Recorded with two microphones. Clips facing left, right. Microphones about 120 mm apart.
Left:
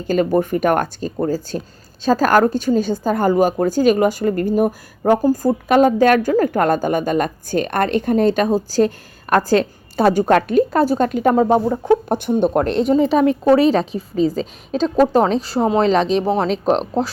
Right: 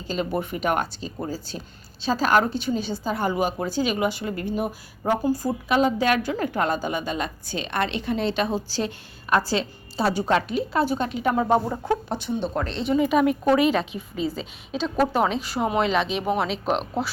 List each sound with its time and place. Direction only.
0.1 s a woman's voice: 45° left (ahead or behind)
11.4 s speech: 20° left (ahead or behind)
12.0 s a woman's voice: 50° left (ahead or behind)
12.9 s a woman's voice: 35° left (ahead or behind)